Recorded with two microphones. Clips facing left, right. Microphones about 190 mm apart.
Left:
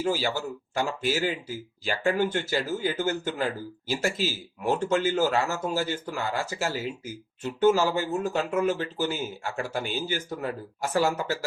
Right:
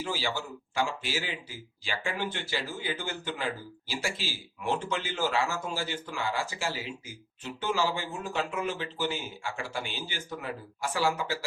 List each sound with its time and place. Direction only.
0.0 s a man's voice: 45° left (ahead or behind)